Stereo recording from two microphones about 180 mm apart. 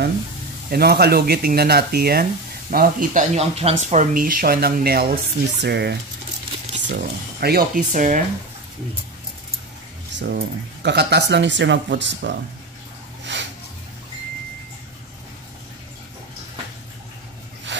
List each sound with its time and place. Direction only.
0.7 s speech: 60° right (ahead or behind); by 8.2 s 45° right (ahead or behind)
10.1 s speech: 65° right (ahead or behind)
13.2 s a sound: 80° right